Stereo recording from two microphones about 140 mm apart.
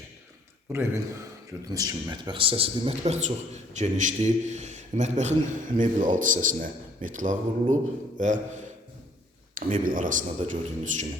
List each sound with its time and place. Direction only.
0.7 s speech: 20° right (ahead or behind)
2.2 s a man's voice: 40° right (ahead or behind); by 8.6 s 65° right (ahead or behind)
9.6 s speech: 75° right (ahead or behind)